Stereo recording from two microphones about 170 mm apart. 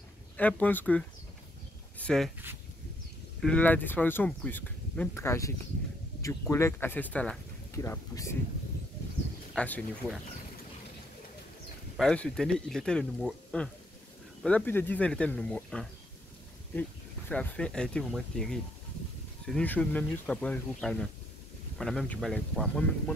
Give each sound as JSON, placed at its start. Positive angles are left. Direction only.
{"t": 0.4, "sound": "speech", "side_deg": 10}
{"t": 3.3, "sound": "speech", "side_deg": 5}
{"t": 9.6, "sound": "speech", "side_deg": 5}
{"t": 12.0, "sound": "speech", "side_deg": 5}
{"t": 17.3, "sound": "speech", "side_deg": 10}